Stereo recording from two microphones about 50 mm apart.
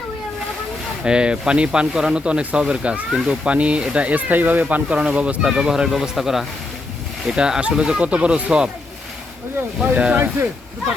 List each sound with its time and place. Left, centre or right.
1.0 s speech: centre
5.5 s speech: centre
9.9 s speech: right